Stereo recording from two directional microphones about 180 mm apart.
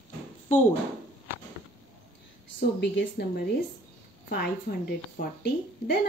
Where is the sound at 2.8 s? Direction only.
90° left.